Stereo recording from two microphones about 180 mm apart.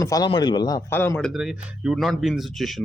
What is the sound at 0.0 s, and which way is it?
A man's voice, 20° left (ahead or behind).